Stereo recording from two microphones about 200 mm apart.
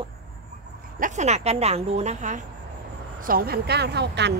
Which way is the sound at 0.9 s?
40° right (ahead or behind).